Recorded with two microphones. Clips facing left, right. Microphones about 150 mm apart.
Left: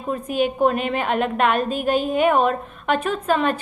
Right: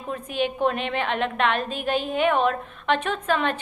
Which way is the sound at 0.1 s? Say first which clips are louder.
Left 5 dB; 45° left (ahead or behind).